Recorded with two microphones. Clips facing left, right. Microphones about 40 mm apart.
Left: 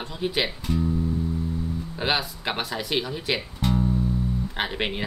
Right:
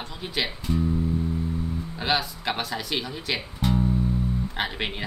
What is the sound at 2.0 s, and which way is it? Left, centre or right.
Speech, centre.